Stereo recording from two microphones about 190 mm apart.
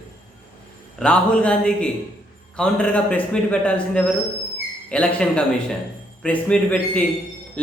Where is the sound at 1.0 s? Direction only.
5° left (ahead or behind).